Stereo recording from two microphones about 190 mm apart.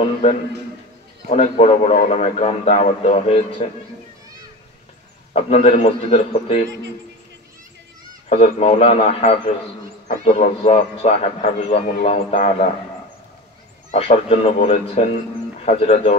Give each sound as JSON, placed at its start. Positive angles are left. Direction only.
{"t": 0.0, "sound": "a man's voice", "side_deg": 35}
{"t": 5.3, "sound": "a man's voice", "side_deg": 30}
{"t": 8.3, "sound": "a man's voice", "side_deg": 35}
{"t": 13.9, "sound": "a man's voice", "side_deg": 30}